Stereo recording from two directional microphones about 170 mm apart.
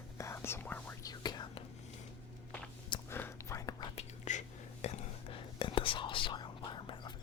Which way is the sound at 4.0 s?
45° left (ahead or behind).